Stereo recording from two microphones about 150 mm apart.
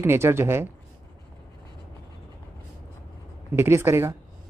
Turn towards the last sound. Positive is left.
turn(degrees=-20)  # may be behind; listen again after turning